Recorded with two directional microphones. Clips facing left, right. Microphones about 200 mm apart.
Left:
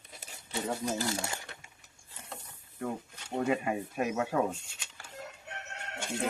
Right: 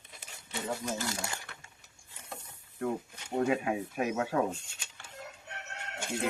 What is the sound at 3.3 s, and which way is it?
Speech, centre (ahead or behind).